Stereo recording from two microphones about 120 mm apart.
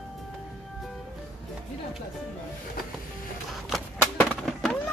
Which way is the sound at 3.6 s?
5° left (ahead or behind).